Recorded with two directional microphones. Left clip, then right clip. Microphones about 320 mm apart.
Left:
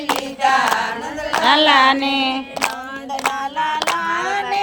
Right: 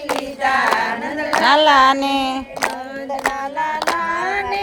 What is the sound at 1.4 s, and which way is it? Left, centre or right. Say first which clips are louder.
Music: right 1 dB; right.